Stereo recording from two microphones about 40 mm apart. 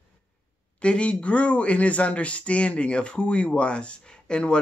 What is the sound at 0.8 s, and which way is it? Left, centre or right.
Speech, left.